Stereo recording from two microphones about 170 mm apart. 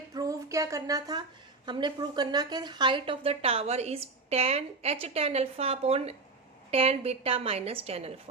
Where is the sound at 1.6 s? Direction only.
25° right (ahead or behind).